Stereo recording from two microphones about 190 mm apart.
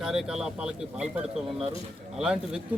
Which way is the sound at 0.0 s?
5° right (ahead or behind).